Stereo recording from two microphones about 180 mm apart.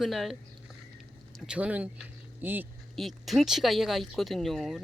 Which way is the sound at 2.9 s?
Centre (ahead or behind).